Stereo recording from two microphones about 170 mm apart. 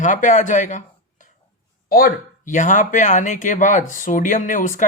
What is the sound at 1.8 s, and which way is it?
Speech, 60° left (ahead or behind).